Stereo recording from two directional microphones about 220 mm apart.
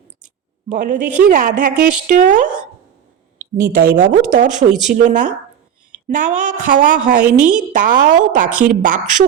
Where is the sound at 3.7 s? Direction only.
50° right (ahead or behind).